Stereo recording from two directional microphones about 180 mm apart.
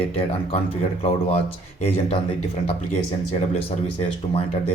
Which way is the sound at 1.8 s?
30° left (ahead or behind).